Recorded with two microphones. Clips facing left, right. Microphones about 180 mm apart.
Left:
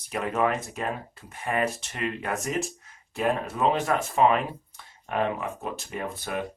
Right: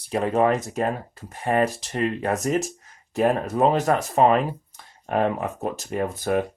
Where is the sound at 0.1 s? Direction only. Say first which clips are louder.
Right 6 dB; 30° right (ahead or behind).